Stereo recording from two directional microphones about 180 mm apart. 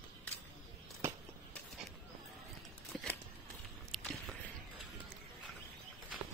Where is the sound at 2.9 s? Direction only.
Centre (ahead or behind).